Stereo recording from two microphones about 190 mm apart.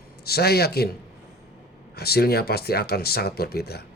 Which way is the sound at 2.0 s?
55° left (ahead or behind).